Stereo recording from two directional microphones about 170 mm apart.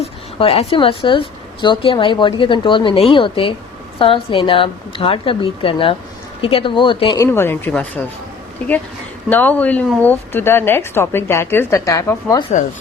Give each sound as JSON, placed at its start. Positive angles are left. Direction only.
{"t": 0.0, "sound": "a woman's voice", "side_deg": 35}
{"t": 7.2, "sound": "a woman's voice", "side_deg": 15}
{"t": 9.3, "sound": "a woman's voice", "side_deg": 10}